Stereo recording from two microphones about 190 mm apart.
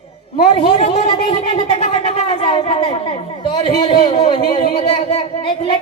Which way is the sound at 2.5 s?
25° left (ahead or behind).